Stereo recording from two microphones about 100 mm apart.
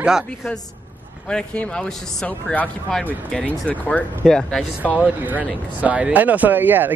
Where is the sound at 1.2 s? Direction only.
10° left (ahead or behind).